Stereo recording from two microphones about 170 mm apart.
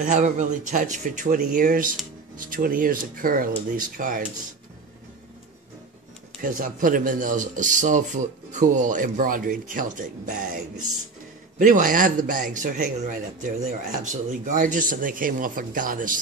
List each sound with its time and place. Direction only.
0.0 s a man's voice: 45° right (ahead or behind)
6.4 s a man's voice: 50° right (ahead or behind)